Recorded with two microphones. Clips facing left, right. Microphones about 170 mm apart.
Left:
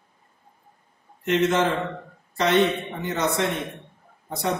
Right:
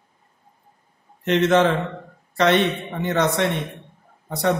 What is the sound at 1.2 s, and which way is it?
Speech, 70° right (ahead or behind).